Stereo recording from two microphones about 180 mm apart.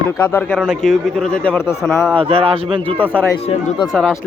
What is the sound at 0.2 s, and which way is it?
Speech, 10° left (ahead or behind).